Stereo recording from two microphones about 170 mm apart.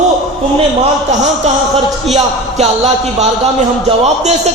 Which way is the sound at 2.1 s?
40° right (ahead or behind).